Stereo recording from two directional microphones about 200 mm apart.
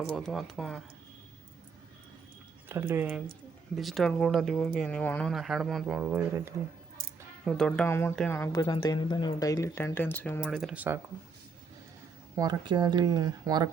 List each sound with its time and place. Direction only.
0.2 s speech: centre (ahead or behind)
2.6 s speech: 10° right (ahead or behind)
7.4 s speech: 5° left (ahead or behind)
12.4 s speech: 20° right (ahead or behind)